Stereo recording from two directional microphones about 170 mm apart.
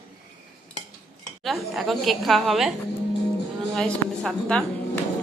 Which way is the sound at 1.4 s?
Centre (ahead or behind).